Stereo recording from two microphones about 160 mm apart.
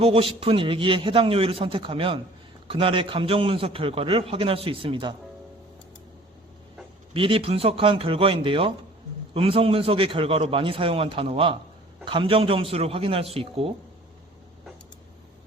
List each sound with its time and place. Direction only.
0.0 s a man's voice: 35° right (ahead or behind)
7.1 s a man's voice: 35° right (ahead or behind)